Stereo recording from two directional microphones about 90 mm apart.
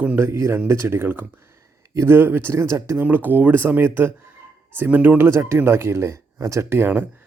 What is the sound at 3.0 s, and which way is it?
Speech, 20° right (ahead or behind).